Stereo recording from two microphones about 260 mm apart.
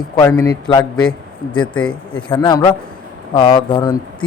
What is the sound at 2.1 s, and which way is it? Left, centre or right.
Speech, centre.